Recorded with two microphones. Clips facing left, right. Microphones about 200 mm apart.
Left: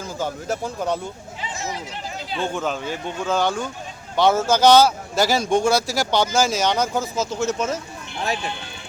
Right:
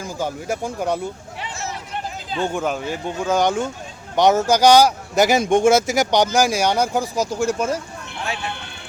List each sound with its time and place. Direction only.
0.0 s speech: 10° right (ahead or behind)
2.4 s speech: 15° right (ahead or behind)